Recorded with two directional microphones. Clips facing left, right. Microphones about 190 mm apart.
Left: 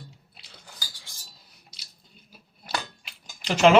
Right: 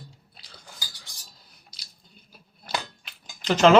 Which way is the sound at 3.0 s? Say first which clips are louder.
Right 6 dB; 5° left (ahead or behind).